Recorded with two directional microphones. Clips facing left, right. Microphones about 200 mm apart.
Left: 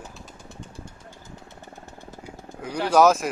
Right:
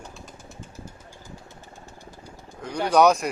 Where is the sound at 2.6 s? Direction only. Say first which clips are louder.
Even; 5° left (ahead or behind).